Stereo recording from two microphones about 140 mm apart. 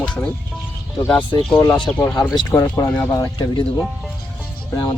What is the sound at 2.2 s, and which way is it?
Speech, 30° left (ahead or behind).